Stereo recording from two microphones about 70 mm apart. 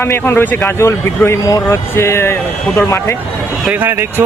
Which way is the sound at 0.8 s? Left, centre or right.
Left.